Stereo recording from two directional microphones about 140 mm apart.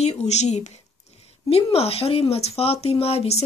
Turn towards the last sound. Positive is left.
turn(degrees=45)  # may be behind; listen again after turning